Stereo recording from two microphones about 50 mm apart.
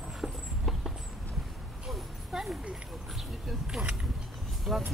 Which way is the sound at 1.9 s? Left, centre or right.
Centre.